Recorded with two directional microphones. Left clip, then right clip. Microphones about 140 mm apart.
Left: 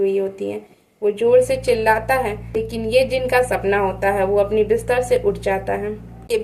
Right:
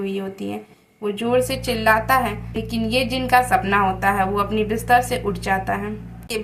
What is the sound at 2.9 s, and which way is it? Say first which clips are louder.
Speech: left 2 dB; 20° left (ahead or behind).